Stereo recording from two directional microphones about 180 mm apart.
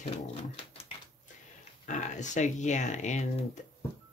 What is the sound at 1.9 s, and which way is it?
Speech, 40° left (ahead or behind).